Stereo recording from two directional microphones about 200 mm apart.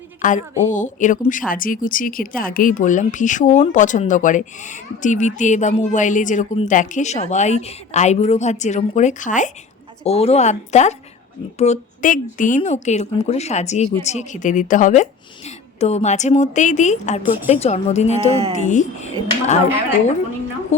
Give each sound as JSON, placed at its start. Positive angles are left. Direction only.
{"t": 0.2, "sound": "a woman's voice", "side_deg": 40}
{"t": 18.3, "sound": "speech", "side_deg": -30}
{"t": 18.5, "sound": "a woman's voice", "side_deg": 35}